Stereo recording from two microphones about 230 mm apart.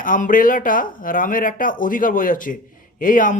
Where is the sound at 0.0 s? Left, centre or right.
Left.